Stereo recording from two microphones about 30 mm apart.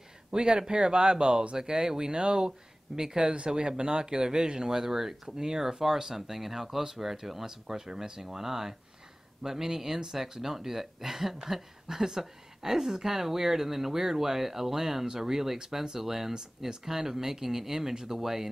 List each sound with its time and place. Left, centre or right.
0.3 s a woman's voice: right; by 18.5 s centre